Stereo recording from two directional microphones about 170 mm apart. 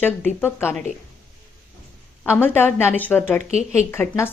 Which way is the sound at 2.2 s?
10° left (ahead or behind).